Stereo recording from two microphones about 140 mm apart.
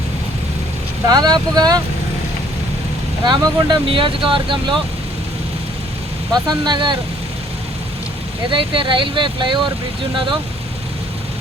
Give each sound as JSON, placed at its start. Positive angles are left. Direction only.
{"t": 1.0, "sound": "speech", "side_deg": -30}
{"t": 3.2, "sound": "speech", "side_deg": -30}
{"t": 6.5, "sound": "speech", "side_deg": -30}
{"t": 8.4, "sound": "speech", "side_deg": -35}